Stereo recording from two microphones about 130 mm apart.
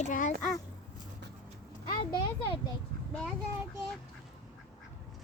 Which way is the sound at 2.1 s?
40° left (ahead or behind).